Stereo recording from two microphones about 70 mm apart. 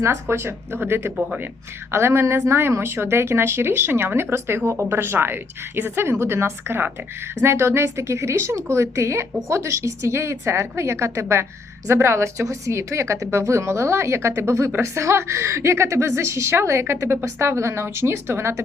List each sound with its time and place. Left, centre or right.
0.0 s a woman's voice: right